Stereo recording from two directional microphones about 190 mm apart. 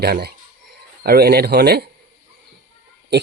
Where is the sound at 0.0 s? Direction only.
55° right (ahead or behind).